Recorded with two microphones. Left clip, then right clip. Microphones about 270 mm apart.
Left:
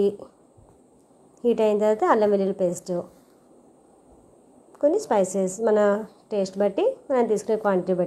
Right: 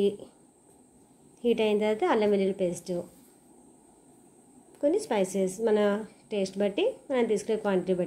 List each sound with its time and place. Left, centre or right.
1.4 s a woman's voice: centre
4.7 s a woman's voice: centre